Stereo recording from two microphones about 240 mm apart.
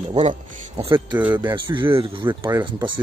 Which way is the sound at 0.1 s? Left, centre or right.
Right.